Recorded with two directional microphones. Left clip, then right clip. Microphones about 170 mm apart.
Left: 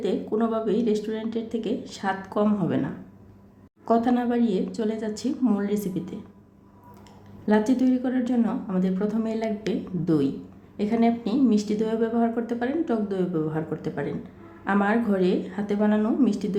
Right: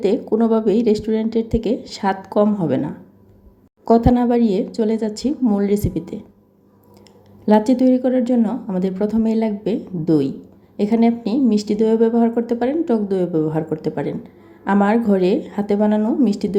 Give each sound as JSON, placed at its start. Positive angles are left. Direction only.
{"t": 0.0, "sound": "speech", "side_deg": -35}
{"t": 7.4, "sound": "speech", "side_deg": -35}